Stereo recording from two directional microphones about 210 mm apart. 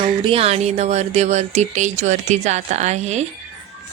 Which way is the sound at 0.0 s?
25° right (ahead or behind).